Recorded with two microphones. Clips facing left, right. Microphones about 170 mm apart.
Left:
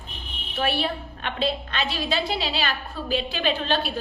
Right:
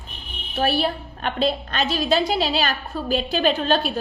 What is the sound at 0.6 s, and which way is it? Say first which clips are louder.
A woman's voice: right 4 dB; 40° right (ahead or behind).